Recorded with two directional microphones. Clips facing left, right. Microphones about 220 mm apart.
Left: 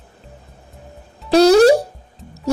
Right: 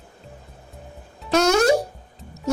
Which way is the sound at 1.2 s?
35° left (ahead or behind).